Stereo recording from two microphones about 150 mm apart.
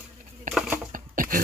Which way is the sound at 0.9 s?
65° right (ahead or behind).